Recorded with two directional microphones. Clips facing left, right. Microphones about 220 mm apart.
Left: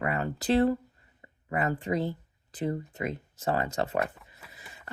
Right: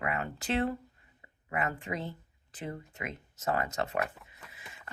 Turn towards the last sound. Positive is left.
turn(degrees=0)  # may be behind; listen again after turning